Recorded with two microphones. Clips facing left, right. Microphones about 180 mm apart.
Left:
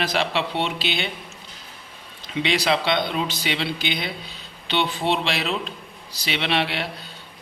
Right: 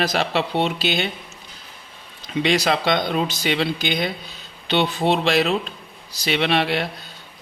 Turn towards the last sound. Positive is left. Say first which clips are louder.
# right 4 dB
turn(degrees=-45)  # may be behind; listen again after turning